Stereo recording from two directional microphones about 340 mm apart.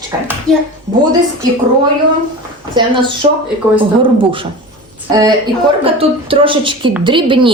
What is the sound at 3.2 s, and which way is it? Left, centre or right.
Speech, centre.